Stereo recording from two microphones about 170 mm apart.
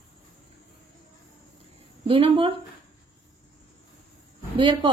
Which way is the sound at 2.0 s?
30° right (ahead or behind).